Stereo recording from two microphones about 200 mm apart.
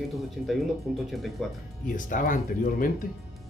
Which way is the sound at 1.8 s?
40° left (ahead or behind).